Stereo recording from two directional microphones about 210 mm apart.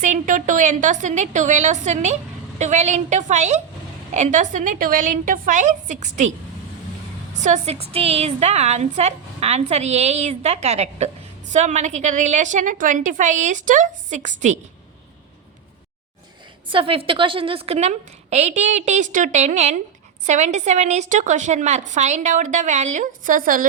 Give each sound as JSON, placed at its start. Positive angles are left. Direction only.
{"t": 0.0, "sound": "a woman's voice", "side_deg": -35}
{"t": 7.4, "sound": "a woman's voice", "side_deg": -30}
{"t": 16.6, "sound": "a woman's voice", "side_deg": -25}